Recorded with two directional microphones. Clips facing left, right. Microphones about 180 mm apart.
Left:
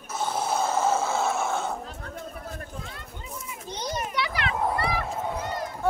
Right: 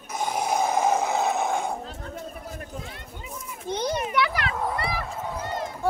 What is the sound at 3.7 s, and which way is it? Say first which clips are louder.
Children playing: right 5 dB; 60° right (ahead or behind).